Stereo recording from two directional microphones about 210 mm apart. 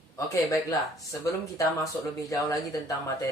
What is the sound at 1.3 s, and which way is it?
Speech, 15° left (ahead or behind).